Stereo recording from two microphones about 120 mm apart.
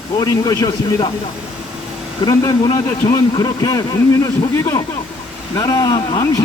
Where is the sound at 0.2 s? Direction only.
35° left (ahead or behind).